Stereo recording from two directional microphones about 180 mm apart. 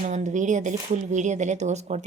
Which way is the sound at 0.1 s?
40° right (ahead or behind).